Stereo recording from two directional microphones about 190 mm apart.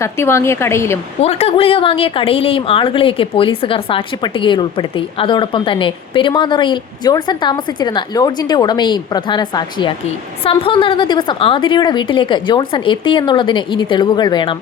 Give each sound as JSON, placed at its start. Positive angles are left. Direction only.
{"t": 0.0, "sound": "a woman's voice", "side_deg": 15}
{"t": 1.2, "sound": "a woman's voice", "side_deg": 35}